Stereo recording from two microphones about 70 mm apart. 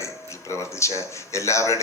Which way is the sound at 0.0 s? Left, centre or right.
Left.